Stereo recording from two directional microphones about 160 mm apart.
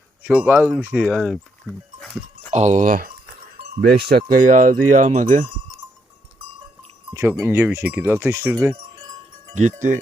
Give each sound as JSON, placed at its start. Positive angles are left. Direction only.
{"t": 0.2, "sound": "speech", "side_deg": -10}
{"t": 2.0, "sound": "sheep", "side_deg": 0}
{"t": 2.5, "sound": "speech", "side_deg": -45}
{"t": 3.6, "sound": "speech", "side_deg": -80}
{"t": 7.1, "sound": "wind chime", "side_deg": -15}
{"t": 7.4, "sound": "speech", "side_deg": -15}
{"t": 9.6, "sound": "speech", "side_deg": -50}